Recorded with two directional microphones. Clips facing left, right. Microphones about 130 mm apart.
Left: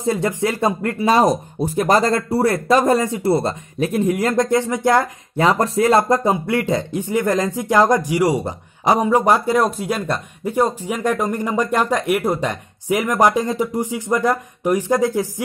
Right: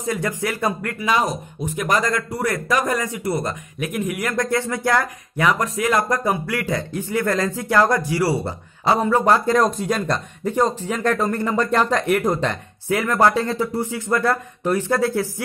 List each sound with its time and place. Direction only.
0.0 s speech: 25° left (ahead or behind)